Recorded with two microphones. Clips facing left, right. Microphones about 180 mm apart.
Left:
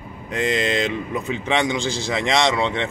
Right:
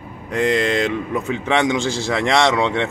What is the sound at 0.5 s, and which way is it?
A man's voice, 20° left (ahead or behind).